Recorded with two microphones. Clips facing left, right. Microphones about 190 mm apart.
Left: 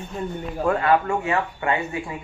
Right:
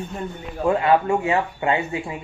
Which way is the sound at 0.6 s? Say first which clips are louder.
Right 2 dB; 20° right (ahead or behind).